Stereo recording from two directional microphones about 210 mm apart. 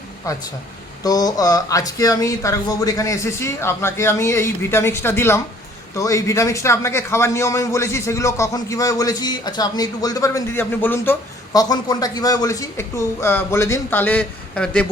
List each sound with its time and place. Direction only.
0.3 s a man's voice: 15° left (ahead or behind)